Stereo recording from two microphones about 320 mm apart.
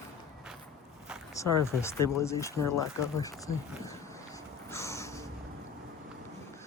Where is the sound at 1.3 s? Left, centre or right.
Centre.